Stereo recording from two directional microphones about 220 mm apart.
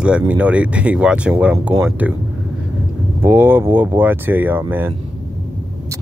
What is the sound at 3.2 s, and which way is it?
Speech, 10° right (ahead or behind).